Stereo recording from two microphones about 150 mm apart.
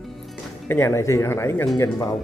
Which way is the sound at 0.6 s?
15° left (ahead or behind).